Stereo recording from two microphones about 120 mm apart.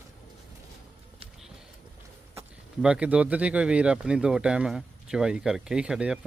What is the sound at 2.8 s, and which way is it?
Speech, 10° right (ahead or behind).